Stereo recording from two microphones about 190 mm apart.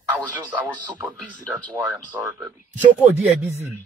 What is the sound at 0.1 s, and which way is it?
Speech, 10° right (ahead or behind).